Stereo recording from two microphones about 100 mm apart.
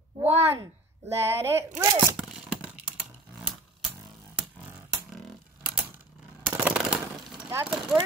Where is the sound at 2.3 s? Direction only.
10° right (ahead or behind).